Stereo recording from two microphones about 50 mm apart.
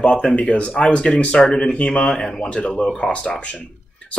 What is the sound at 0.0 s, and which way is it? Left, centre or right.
Speech, centre.